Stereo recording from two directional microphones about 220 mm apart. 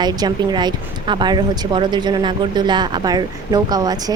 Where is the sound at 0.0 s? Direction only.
20° right (ahead or behind).